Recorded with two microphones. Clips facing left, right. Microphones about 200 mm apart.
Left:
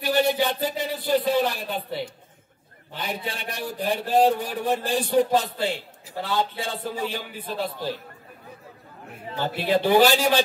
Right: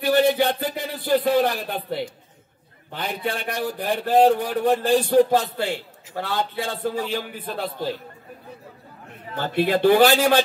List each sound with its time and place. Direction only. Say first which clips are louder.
0.3 s a sound: right 2 dB; 55° right (ahead or behind)
2.9 s a man's voice: right 4 dB; 60° right (ahead or behind)
9.7 s a man's voice: right 2 dB; 60° right (ahead or behind)